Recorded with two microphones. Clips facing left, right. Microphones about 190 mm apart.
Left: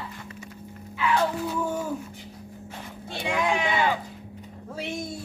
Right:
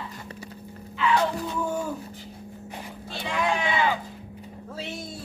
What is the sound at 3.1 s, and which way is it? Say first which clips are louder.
Sheep: left 1 dB; 15° left (ahead or behind).